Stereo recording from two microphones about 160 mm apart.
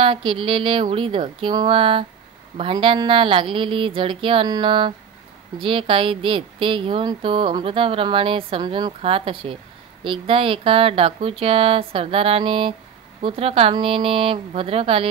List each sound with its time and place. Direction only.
0.0 s speech: 35° right (ahead or behind)